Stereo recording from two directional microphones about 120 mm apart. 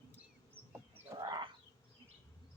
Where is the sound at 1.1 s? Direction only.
35° right (ahead or behind).